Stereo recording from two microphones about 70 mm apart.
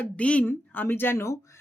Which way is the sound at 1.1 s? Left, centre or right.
Left.